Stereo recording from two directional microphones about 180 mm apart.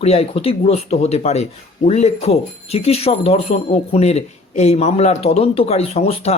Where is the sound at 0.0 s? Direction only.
35° left (ahead or behind).